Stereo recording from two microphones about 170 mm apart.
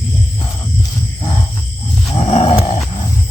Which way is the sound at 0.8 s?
20° left (ahead or behind).